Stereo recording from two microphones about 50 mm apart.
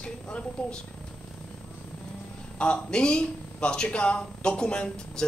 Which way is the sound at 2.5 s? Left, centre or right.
Left.